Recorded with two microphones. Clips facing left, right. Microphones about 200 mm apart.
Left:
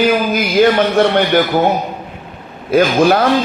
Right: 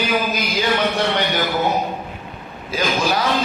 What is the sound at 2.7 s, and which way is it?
Speech, 55° left (ahead or behind).